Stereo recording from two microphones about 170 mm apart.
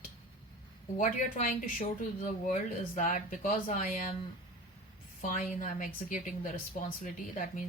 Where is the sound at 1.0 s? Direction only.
50° left (ahead or behind).